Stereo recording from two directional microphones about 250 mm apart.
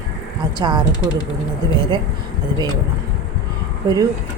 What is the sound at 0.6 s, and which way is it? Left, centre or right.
A woman's voice, centre.